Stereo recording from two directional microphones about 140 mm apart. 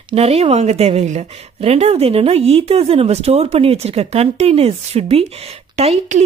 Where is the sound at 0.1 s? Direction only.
45° right (ahead or behind).